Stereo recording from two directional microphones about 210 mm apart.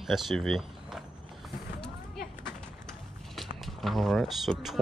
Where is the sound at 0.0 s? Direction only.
Centre (ahead or behind).